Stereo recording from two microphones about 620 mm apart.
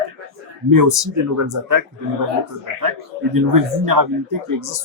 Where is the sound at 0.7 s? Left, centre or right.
Right.